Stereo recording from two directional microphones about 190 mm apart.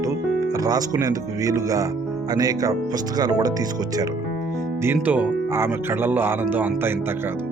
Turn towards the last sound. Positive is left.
turn(degrees=-10)  # may be behind; listen again after turning